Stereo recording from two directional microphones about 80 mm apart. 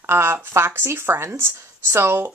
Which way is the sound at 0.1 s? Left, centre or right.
Right.